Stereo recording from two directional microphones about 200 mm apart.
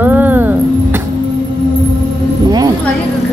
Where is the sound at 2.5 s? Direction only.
20° right (ahead or behind).